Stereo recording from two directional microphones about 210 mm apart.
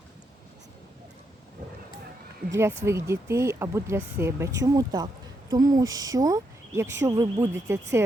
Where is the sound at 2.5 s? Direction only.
10° right (ahead or behind).